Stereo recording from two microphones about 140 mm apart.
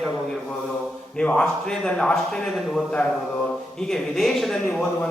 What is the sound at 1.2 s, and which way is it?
A man's voice, 5° left (ahead or behind).